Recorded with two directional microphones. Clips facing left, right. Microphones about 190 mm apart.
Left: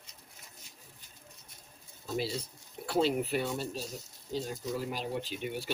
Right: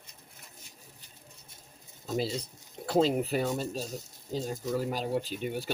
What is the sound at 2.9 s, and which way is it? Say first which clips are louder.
Speech: right 3 dB; 40° right (ahead or behind).